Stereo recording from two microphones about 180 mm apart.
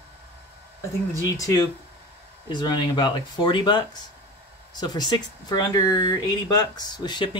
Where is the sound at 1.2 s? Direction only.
20° left (ahead or behind).